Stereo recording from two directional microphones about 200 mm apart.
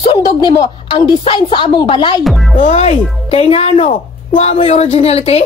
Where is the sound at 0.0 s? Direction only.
20° left (ahead or behind).